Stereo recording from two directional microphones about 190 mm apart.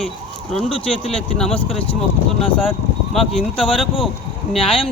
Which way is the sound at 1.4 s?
Centre (ahead or behind).